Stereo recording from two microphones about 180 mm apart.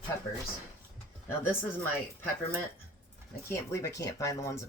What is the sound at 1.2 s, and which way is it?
Speech, 10° left (ahead or behind).